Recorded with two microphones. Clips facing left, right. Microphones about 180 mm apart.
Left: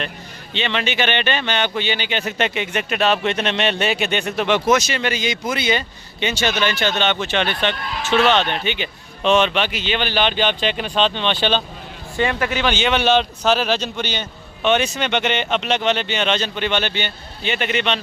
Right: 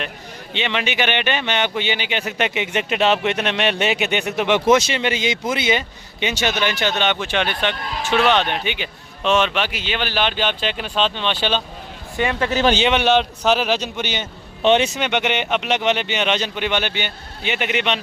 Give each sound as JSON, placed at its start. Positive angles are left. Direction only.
{"t": 0.5, "sound": "speech", "side_deg": -10}
{"t": 12.1, "sound": "speech", "side_deg": -20}
{"t": 12.5, "sound": "a man's voice", "side_deg": -40}
{"t": 12.8, "sound": "speech", "side_deg": -15}
{"t": 14.6, "sound": "speech", "side_deg": -30}
{"t": 14.9, "sound": "speech", "side_deg": -15}